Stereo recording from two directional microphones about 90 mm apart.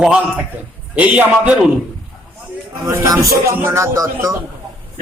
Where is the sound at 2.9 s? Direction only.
35° right (ahead or behind).